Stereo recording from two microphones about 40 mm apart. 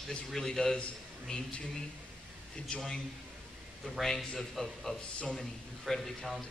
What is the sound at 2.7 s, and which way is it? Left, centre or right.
Speech, left.